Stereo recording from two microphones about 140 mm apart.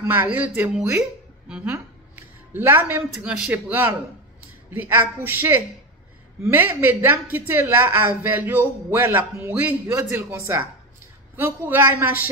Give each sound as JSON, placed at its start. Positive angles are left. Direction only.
{"t": 0.0, "sound": "a woman's voice", "side_deg": -15}